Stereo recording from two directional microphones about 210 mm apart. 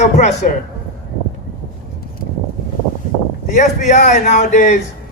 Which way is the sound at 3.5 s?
35° left (ahead or behind).